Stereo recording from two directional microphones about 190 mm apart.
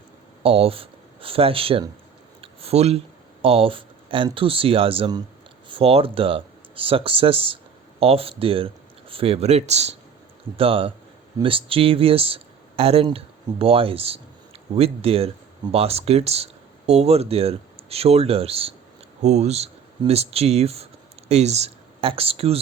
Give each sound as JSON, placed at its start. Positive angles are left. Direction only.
{"t": 0.4, "sound": "speech", "side_deg": -30}
{"t": 2.4, "sound": "a sound", "side_deg": -30}
{"t": 3.4, "sound": "speech", "side_deg": -30}